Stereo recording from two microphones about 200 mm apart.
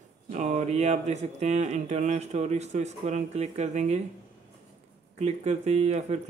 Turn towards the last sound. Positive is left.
turn(degrees=-35)  # may be behind; listen again after turning